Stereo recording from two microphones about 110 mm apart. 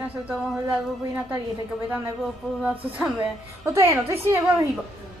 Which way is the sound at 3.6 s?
25° right (ahead or behind).